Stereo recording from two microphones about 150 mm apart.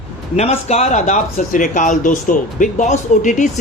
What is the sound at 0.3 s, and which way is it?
Speech, 45° left (ahead or behind).